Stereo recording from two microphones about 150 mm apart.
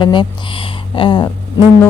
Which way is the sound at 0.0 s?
35° left (ahead or behind).